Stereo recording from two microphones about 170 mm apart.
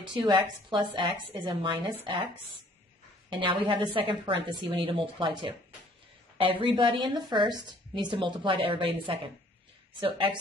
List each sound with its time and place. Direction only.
0.1 s a woman's voice: 30° right (ahead or behind)
3.3 s a woman's voice: 30° right (ahead or behind)